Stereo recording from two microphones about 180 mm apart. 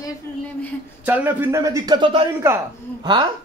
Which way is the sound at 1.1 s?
10° right (ahead or behind).